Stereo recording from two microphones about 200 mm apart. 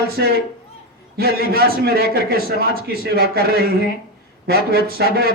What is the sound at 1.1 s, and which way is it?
Speech, 50° right (ahead or behind).